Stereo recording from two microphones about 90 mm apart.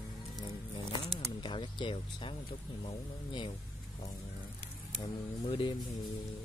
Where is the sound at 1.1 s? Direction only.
60° left (ahead or behind).